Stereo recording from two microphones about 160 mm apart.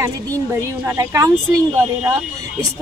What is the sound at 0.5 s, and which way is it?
A woman's voice, 20° right (ahead or behind).